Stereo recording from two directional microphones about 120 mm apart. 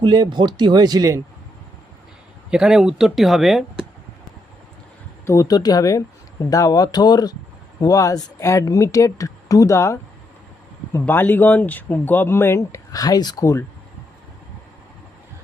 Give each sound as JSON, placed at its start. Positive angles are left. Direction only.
{"t": 0.0, "sound": "speech", "side_deg": -35}
{"t": 2.5, "sound": "speech", "side_deg": -5}
{"t": 5.2, "sound": "speech", "side_deg": 25}